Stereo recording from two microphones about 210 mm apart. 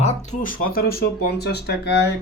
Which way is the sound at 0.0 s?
35° left (ahead or behind).